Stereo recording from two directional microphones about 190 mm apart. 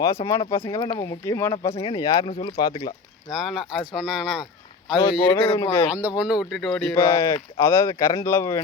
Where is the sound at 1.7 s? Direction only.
25° left (ahead or behind).